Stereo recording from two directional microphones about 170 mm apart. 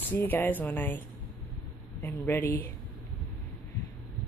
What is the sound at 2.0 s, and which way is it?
Speech, 10° left (ahead or behind).